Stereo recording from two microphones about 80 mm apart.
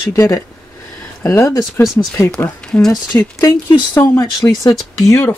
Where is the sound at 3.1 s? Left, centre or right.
Left.